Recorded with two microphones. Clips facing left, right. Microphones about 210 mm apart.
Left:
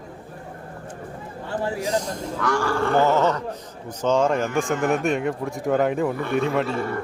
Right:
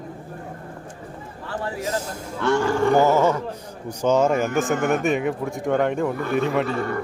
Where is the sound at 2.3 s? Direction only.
25° right (ahead or behind); by 4.7 s centre (ahead or behind).